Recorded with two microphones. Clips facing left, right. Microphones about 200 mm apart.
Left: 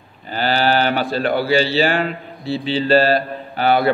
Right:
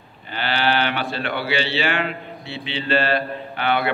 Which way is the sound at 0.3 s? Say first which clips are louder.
Left 4 dB; 40° left (ahead or behind).